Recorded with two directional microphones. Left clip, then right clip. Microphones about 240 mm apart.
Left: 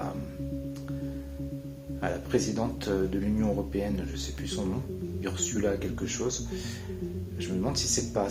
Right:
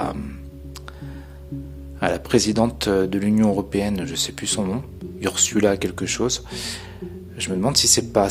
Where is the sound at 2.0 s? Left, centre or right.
Right.